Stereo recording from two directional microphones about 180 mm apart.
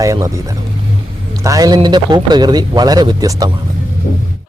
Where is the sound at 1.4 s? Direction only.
20° right (ahead or behind).